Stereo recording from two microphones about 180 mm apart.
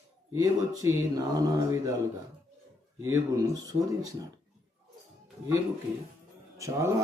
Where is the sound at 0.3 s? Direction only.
20° right (ahead or behind).